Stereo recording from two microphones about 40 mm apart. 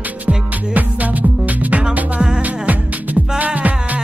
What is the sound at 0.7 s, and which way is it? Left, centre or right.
Music, right.